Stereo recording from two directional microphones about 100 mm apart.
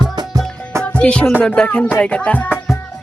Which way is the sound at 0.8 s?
10° left (ahead or behind).